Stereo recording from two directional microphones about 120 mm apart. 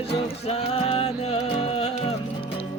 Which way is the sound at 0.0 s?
55° left (ahead or behind).